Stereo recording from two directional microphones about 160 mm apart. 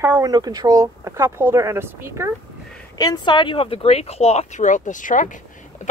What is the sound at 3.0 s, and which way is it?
Speech, 25° left (ahead or behind).